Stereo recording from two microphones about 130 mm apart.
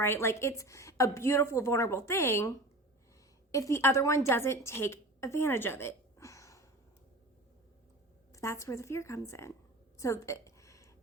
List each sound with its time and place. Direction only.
0.0 s a woman's voice: 20° left (ahead or behind)
3.5 s a woman's voice: 25° left (ahead or behind)
8.3 s a woman's voice: 25° left (ahead or behind)
10.0 s a sound: 25° left (ahead or behind)